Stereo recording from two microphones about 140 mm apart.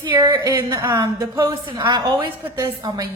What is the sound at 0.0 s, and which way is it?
A woman's voice, 30° right (ahead or behind).